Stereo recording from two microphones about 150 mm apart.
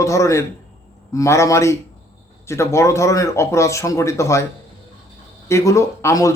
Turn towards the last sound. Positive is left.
turn(degrees=20)  # may be behind; listen again after turning